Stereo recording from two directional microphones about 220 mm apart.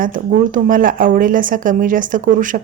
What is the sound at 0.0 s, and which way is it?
A woman's voice, 40° right (ahead or behind).